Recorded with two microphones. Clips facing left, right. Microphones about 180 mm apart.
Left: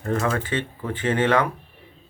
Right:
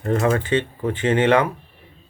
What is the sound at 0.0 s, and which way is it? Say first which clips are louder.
Speech: right 4 dB; 25° right (ahead or behind).